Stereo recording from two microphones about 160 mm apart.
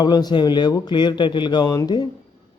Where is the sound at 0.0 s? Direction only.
25° left (ahead or behind).